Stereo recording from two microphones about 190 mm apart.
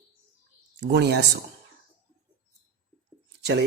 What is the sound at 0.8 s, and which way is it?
Speech, 60° right (ahead or behind).